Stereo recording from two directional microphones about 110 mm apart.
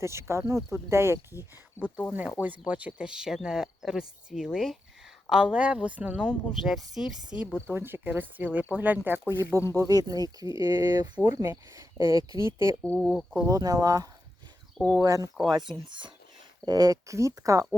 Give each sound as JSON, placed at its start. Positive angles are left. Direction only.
{"t": 0.0, "sound": "speech", "side_deg": -25}
{"t": 1.8, "sound": "speech", "side_deg": 10}
{"t": 2.4, "sound": "speech", "side_deg": -15}
{"t": 6.2, "sound": "speech", "side_deg": 0}
{"t": 9.7, "sound": "speech", "side_deg": -35}
{"t": 12.8, "sound": "speech", "side_deg": 10}
{"t": 13.5, "sound": "speech", "side_deg": -35}
{"t": 14.8, "sound": "speech", "side_deg": -10}
{"t": 15.0, "sound": "speech", "side_deg": -30}